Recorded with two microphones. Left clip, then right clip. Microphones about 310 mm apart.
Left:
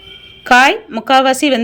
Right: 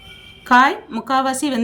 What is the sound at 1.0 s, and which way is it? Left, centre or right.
Speech, centre.